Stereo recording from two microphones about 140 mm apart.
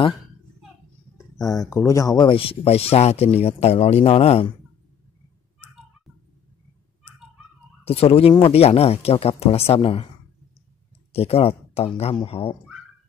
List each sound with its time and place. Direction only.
1.1 s speech: 25° left (ahead or behind); by 4.5 s 45° left (ahead or behind)
7.8 s speech: 45° left (ahead or behind)
11.1 s speech: 45° left (ahead or behind)